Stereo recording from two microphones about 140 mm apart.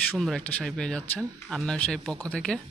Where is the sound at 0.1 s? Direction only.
5° left (ahead or behind).